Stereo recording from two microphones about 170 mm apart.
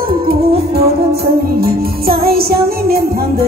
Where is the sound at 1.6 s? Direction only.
60° right (ahead or behind).